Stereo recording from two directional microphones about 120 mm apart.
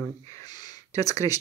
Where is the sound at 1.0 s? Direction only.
30° left (ahead or behind).